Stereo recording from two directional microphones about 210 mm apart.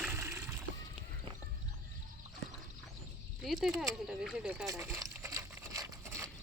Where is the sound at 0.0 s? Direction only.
10° right (ahead or behind).